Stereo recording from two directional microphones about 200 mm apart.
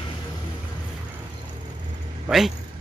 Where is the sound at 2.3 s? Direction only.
Centre (ahead or behind).